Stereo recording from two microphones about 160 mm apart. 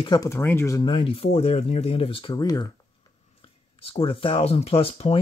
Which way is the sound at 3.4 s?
35° left (ahead or behind).